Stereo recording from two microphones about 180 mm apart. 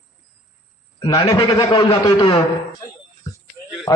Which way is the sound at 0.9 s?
25° left (ahead or behind).